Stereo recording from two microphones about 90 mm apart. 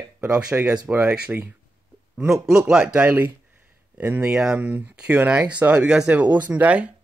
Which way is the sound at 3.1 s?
20° right (ahead or behind).